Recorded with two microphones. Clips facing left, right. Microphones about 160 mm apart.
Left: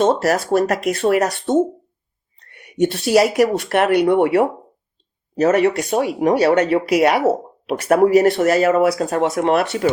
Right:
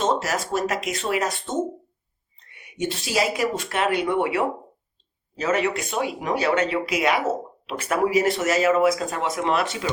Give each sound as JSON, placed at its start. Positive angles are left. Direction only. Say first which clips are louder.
{"t": 0.0, "sound": "a woman's voice", "louder": "left 7 dB", "side_deg": 60}
{"t": 4.1, "sound": "speech", "louder": "left 8 dB", "side_deg": 50}
{"t": 7.8, "sound": "speech", "louder": "left 8 dB", "side_deg": 50}